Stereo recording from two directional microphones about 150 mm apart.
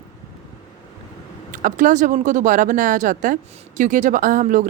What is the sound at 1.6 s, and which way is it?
Speech, 60° right (ahead or behind).